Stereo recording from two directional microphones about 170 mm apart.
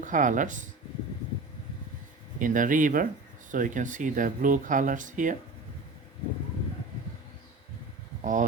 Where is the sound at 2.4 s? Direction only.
50° right (ahead or behind).